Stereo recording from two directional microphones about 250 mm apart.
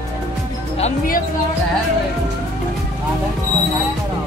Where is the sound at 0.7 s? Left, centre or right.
Left.